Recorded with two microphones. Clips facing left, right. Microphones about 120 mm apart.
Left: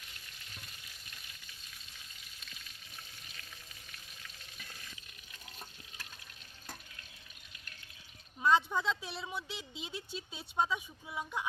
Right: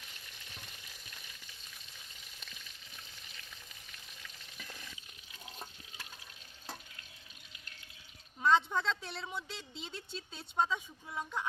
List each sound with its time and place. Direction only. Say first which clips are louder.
5.5 s water: right 3 dB; 25° right (ahead or behind)
8.4 s a woman's voice: even; 5° left (ahead or behind)